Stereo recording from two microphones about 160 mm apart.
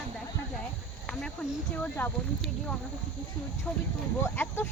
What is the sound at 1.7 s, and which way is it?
Speech, 10° left (ahead or behind).